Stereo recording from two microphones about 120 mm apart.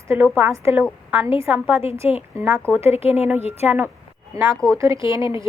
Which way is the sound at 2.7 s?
55° left (ahead or behind).